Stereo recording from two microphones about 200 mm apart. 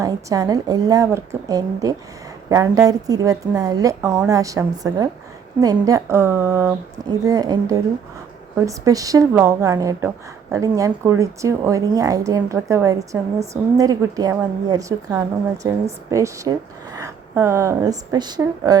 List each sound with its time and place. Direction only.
0.0 s a woman's voice: 15° right (ahead or behind)